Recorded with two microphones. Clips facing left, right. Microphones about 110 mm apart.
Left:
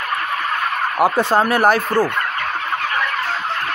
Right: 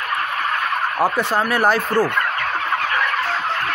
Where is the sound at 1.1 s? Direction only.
25° left (ahead or behind).